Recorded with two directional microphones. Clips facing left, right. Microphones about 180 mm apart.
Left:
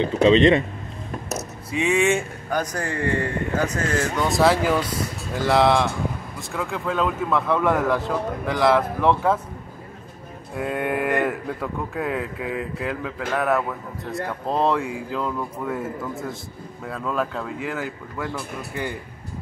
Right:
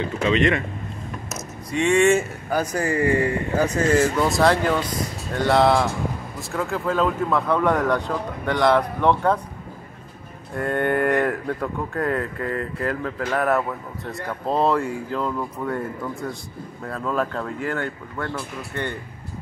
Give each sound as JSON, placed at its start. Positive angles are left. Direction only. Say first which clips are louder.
{"t": 0.0, "sound": "speech", "louder": "left 5 dB", "side_deg": 30}
{"t": 1.7, "sound": "speech", "louder": "right 3 dB", "side_deg": 0}
{"t": 10.5, "sound": "speech", "louder": "right 3 dB", "side_deg": 5}